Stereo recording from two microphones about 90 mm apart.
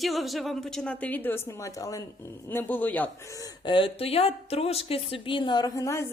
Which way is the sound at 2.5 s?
20° left (ahead or behind).